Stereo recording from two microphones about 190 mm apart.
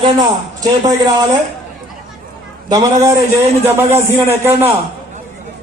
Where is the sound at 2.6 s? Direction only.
20° right (ahead or behind).